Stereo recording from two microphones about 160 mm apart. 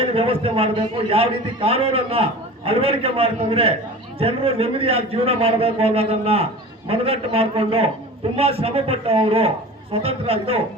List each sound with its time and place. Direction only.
0.0 s a man's voice: 35° right (ahead or behind)